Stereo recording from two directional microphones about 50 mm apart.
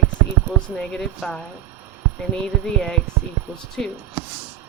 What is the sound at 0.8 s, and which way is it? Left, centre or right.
Speech, centre.